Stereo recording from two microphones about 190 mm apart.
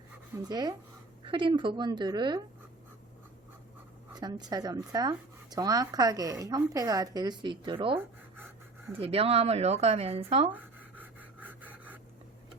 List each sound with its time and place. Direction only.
0.4 s speech: 20° right (ahead or behind)
4.1 s speech: 20° right (ahead or behind)
10.5 s pant: 10° right (ahead or behind)